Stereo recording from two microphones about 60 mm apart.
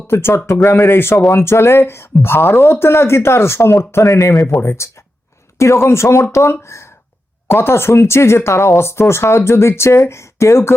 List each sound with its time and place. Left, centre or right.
0.1 s speech: left
0.9 s speech: left
4.1 s speech: left